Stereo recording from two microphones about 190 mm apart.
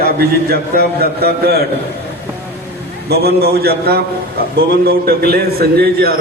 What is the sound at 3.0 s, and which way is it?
A man's voice, 55° right (ahead or behind).